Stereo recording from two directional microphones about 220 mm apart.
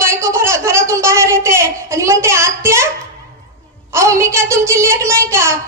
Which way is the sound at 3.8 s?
15° right (ahead or behind).